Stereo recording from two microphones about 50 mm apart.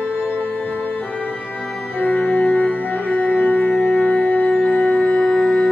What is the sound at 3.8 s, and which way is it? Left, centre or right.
Music, centre.